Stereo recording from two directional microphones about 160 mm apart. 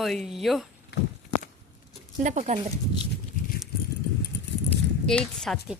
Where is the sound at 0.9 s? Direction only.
90° left.